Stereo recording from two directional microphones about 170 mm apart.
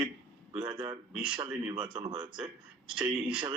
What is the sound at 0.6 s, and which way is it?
Speech, 10° right (ahead or behind).